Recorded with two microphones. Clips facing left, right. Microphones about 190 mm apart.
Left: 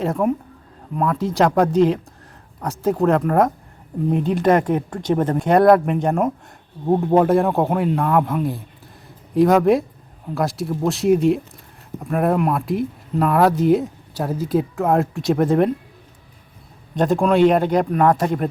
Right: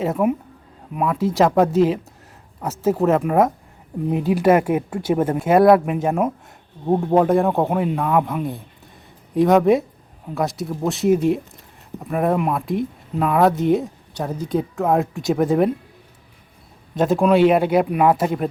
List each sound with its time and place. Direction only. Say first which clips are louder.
0.0 s speech: even; 5° right (ahead or behind)
16.9 s speech: right 1 dB; centre (ahead or behind)